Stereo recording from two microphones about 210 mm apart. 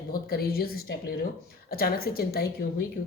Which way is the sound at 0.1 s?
45° left (ahead or behind).